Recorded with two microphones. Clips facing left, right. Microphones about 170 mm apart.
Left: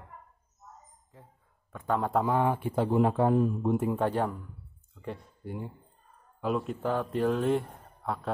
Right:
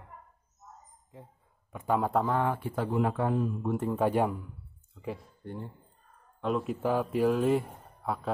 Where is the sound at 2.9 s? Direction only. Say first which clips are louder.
Left 4 dB; 30° left (ahead or behind).